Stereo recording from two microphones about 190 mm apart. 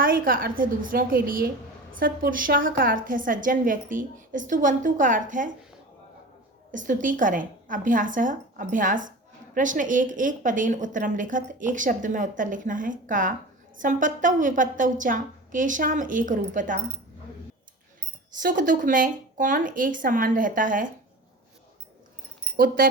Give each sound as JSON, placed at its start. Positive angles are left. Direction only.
{"t": 0.0, "sound": "a woman's voice", "side_deg": -50}
{"t": 6.7, "sound": "a woman's voice", "side_deg": -45}
{"t": 18.4, "sound": "a woman's voice", "side_deg": -45}
{"t": 22.5, "sound": "a woman's voice", "side_deg": -50}